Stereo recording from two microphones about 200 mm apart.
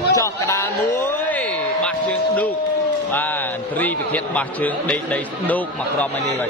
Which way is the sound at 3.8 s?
10° left (ahead or behind).